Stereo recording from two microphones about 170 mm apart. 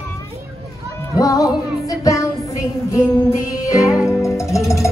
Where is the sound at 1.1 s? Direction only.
20° left (ahead or behind).